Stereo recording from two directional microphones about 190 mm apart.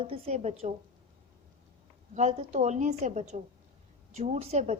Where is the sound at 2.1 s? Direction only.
35° right (ahead or behind).